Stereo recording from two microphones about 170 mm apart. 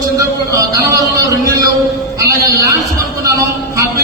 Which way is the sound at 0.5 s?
20° right (ahead or behind).